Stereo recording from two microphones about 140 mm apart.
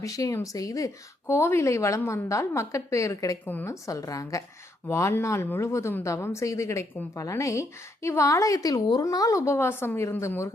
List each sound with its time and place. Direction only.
0.0 s a woman's voice: 25° left (ahead or behind)